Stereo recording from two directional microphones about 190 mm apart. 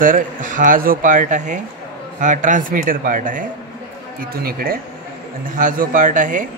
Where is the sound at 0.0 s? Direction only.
45° right (ahead or behind).